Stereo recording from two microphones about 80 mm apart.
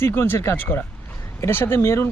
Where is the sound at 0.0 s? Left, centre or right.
Left.